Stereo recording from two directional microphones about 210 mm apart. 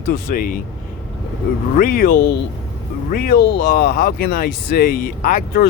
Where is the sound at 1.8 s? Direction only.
45° left (ahead or behind).